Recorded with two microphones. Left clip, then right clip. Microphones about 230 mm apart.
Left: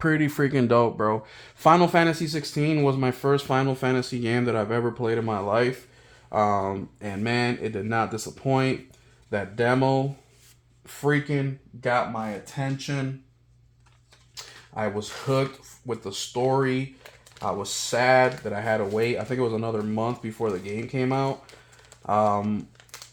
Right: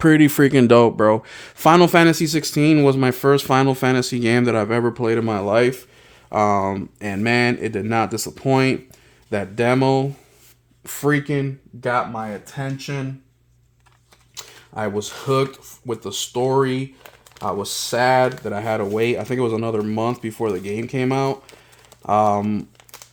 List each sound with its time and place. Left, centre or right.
0.0 s speech: right
11.8 s speech: right
14.3 s speech: right